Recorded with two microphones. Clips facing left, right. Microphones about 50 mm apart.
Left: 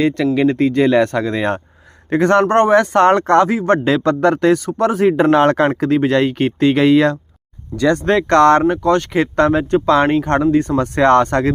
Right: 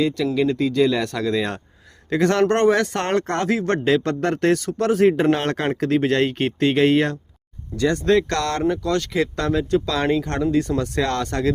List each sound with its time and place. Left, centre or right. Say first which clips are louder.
0.3 s speech: left 3 dB; left
5.6 s speech: left 5 dB; left
8.8 s speech: left 6 dB; left